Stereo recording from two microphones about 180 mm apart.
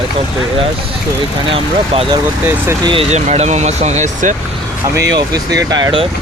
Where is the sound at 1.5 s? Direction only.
30° right (ahead or behind).